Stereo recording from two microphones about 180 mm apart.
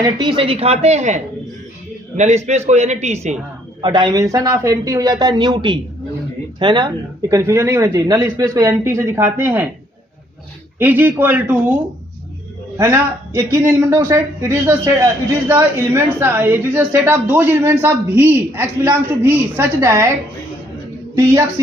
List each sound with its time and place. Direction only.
0.0 s speech: 25° right (ahead or behind)
3.8 s a man's voice: 25° right (ahead or behind)
10.8 s a man's voice: 10° right (ahead or behind)